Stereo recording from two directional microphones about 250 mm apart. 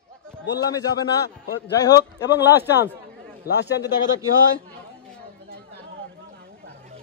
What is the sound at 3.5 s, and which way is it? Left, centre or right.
Speech, left.